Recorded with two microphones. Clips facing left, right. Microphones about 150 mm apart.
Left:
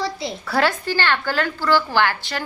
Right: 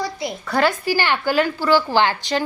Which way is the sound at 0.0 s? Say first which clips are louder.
Even; 25° left (ahead or behind).